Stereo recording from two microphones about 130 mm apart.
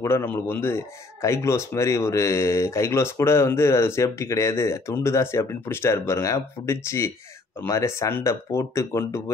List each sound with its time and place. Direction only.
0.0 s speech: 15° left (ahead or behind)